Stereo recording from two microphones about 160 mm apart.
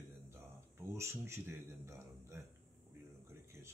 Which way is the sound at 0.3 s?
15° right (ahead or behind).